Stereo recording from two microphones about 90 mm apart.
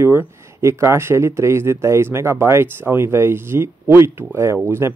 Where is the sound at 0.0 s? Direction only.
25° right (ahead or behind).